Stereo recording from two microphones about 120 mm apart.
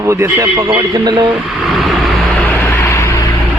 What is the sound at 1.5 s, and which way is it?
Vehicle, centre (ahead or behind).